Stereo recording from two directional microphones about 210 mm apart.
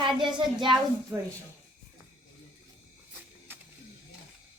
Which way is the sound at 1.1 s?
5° right (ahead or behind).